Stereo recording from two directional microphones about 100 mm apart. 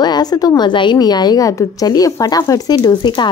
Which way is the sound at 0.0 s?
45° left (ahead or behind).